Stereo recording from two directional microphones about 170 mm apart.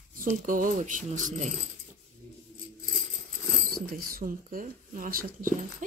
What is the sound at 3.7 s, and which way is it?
Speech, 55° right (ahead or behind).